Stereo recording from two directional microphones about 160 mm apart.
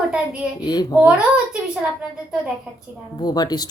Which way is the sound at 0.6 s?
25° left (ahead or behind).